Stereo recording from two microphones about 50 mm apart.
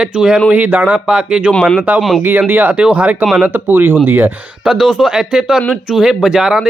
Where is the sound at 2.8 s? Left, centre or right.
Right.